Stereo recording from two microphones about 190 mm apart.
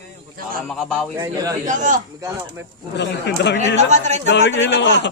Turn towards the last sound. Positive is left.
turn(degrees=70)  # may be behind; listen again after turning